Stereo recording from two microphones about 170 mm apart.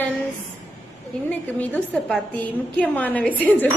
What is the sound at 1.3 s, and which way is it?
A woman's voice, 10° left (ahead or behind).